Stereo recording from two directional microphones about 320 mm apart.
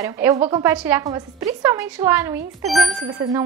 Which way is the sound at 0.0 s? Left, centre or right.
Centre.